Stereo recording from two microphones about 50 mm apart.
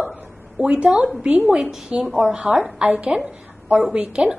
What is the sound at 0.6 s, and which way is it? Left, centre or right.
A woman's voice, centre.